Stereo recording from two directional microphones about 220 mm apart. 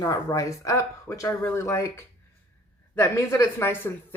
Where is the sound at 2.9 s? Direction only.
10° left (ahead or behind).